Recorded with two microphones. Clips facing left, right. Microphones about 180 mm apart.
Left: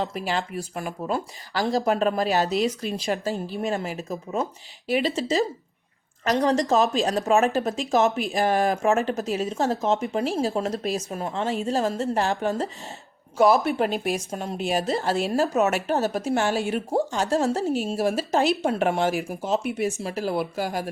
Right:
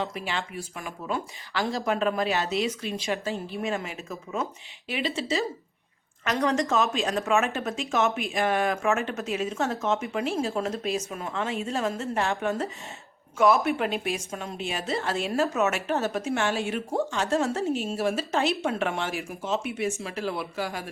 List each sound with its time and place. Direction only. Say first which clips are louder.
0.0 s speech: left 4 dB; 40° left (ahead or behind)